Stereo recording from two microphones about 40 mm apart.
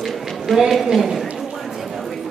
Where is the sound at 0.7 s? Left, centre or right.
Centre.